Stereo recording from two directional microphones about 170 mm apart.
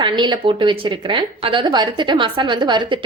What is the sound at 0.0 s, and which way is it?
A woman's voice, 25° right (ahead or behind).